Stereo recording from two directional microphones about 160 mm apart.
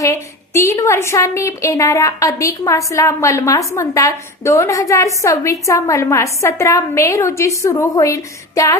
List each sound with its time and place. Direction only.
0.0 s a woman's voice: 20° left (ahead or behind)